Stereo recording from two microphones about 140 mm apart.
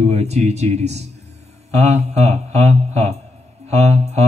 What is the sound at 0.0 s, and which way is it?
Mantra, 50° right (ahead or behind).